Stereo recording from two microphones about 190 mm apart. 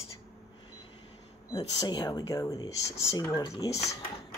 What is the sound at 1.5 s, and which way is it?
Speech, 20° left (ahead or behind).